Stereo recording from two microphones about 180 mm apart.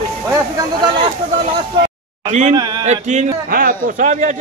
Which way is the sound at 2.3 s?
40° right (ahead or behind).